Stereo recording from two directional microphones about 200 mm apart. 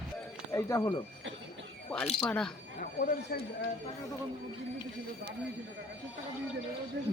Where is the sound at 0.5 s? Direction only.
20° left (ahead or behind).